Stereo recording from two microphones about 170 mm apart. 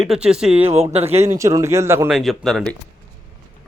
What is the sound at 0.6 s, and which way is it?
Speech, 35° right (ahead or behind).